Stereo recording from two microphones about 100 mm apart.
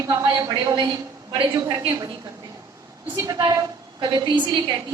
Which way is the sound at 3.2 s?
40° right (ahead or behind).